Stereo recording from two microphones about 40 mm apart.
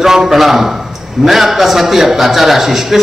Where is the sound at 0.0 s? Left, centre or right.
Centre.